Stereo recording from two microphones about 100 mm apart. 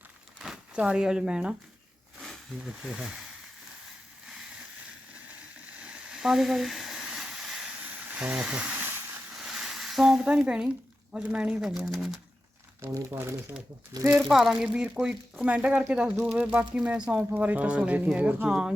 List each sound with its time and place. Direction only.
0.3 s speech: 5° right (ahead or behind)
5.8 s a sound: 10° right (ahead or behind)
7.9 s hiss: 15° right (ahead or behind)
9.3 s a sound: 5° right (ahead or behind)
11.1 s speech: 10° right (ahead or behind)
12.8 s speech: 25° right (ahead or behind)
14.2 s speech: centre (ahead or behind)